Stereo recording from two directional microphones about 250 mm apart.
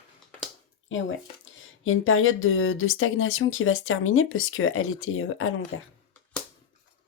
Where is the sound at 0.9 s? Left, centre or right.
Left.